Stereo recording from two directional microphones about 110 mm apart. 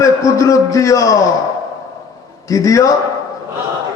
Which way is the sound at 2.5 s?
30° left (ahead or behind).